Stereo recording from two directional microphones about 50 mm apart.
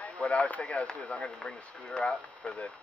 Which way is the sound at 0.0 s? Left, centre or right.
Left.